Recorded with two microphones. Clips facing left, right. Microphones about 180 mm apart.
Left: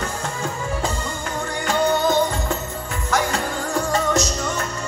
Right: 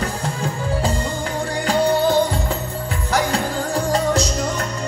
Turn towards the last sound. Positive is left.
turn(degrees=-30)  # may be behind; listen again after turning